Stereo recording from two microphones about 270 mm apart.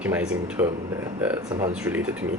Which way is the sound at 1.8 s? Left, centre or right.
Centre.